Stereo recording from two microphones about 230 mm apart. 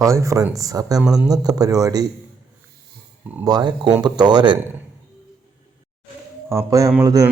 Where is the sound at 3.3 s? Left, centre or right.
Centre.